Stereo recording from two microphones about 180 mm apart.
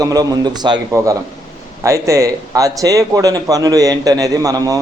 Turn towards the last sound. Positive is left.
turn(degrees=-20)  # may be behind; listen again after turning